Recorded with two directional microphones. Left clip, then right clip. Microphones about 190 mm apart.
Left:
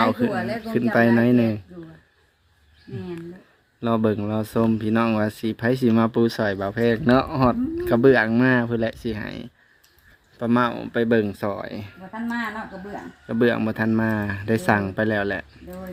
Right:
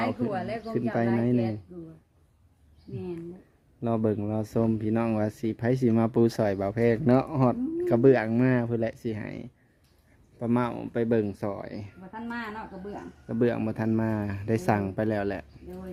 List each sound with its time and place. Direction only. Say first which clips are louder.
0.3 s speech: left 5 dB; 55° left (ahead or behind)
0.9 s speech: left 9 dB; centre (ahead or behind)
3.8 s speech: left 5 dB; 5° right (ahead or behind)
13.2 s speech: left 6 dB; centre (ahead or behind)